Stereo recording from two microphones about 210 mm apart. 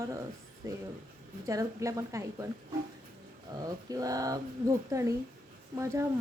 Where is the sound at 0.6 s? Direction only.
15° right (ahead or behind).